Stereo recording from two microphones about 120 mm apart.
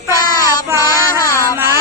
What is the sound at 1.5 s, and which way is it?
Music, 20° right (ahead or behind).